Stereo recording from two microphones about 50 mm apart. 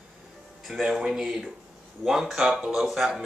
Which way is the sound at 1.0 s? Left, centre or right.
Centre.